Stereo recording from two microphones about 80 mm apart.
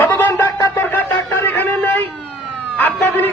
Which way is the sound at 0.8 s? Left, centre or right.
Left.